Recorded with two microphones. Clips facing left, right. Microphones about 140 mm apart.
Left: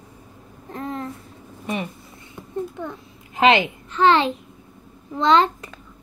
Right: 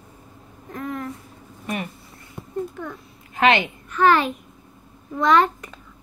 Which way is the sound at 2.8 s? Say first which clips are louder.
Left 1 dB; 25° left (ahead or behind).